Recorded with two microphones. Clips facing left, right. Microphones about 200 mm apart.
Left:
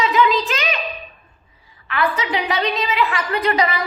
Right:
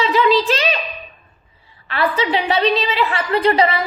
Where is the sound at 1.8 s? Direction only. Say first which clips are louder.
Right 3 dB; 30° right (ahead or behind).